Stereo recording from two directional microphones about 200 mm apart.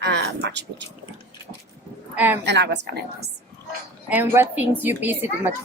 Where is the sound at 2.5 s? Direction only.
60° right (ahead or behind).